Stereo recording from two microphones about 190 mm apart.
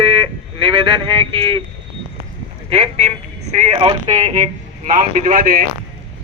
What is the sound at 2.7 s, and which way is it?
Speech, 35° right (ahead or behind).